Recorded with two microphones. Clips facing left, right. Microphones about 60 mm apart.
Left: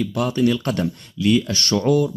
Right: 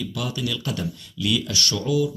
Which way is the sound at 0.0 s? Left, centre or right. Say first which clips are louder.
Left 9 dB; left.